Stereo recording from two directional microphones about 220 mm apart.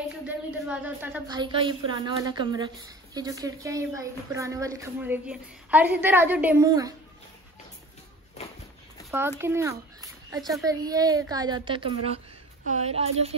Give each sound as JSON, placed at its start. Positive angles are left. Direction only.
{"t": 0.7, "sound": "speech", "side_deg": -5}
{"t": 1.2, "sound": "a woman's voice", "side_deg": -20}
{"t": 9.4, "sound": "a woman's voice", "side_deg": -10}